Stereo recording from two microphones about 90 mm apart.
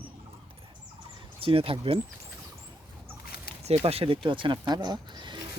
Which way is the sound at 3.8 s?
85° right.